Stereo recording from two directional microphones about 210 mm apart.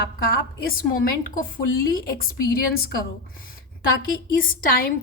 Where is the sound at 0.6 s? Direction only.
45° left (ahead or behind).